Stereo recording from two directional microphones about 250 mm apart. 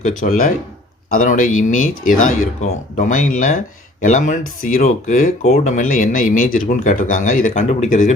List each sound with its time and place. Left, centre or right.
0.0 s speech: left